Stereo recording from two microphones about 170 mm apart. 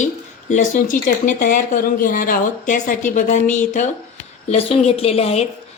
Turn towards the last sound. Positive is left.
turn(degrees=35)  # may be behind; listen again after turning